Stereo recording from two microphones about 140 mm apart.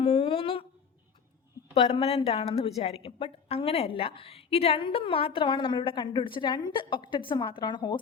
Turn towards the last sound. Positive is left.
turn(degrees=30)  # may be behind; listen again after turning